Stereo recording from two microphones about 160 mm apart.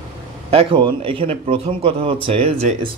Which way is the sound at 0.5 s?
35° right (ahead or behind).